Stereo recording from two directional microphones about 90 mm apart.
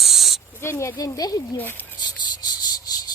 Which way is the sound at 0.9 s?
45° left (ahead or behind).